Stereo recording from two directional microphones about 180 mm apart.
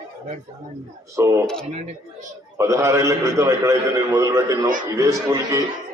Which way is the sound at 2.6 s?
15° right (ahead or behind).